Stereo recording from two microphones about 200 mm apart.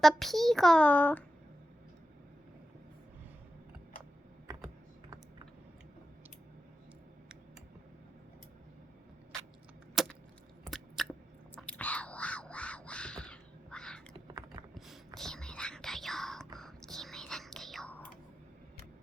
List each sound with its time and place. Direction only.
0.0 s a child's voice: centre (ahead or behind)
4.5 s computer keyboard: 20° right (ahead or behind)
9.9 s keys jangling: centre (ahead or behind)
10.6 s chewing: centre (ahead or behind)
11.5 s whispering: 5° left (ahead or behind)